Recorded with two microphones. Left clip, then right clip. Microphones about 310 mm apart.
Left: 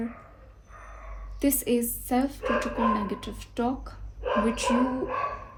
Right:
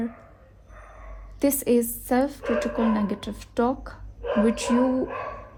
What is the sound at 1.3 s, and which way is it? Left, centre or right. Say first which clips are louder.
Speech: right 4 dB; right.